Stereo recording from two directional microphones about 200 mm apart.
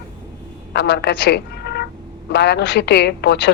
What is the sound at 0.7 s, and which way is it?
A woman's voice, 55° left (ahead or behind).